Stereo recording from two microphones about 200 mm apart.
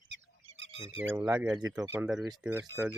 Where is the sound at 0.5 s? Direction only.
70° right (ahead or behind).